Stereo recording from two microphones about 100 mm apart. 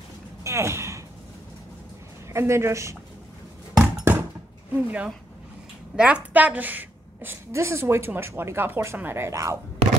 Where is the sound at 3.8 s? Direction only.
20° right (ahead or behind).